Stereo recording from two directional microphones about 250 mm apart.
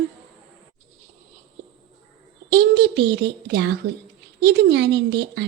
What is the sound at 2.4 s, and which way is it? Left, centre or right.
A woman's voice, right.